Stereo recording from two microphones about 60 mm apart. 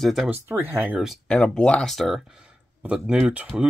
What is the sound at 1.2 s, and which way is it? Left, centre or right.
Speech, centre.